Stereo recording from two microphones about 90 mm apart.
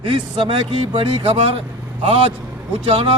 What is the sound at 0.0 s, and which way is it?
Speech, 70° right (ahead or behind).